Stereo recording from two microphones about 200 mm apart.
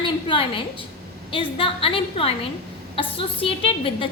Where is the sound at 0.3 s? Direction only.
25° left (ahead or behind).